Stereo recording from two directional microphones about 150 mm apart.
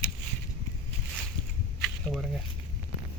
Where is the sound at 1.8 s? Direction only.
Centre (ahead or behind).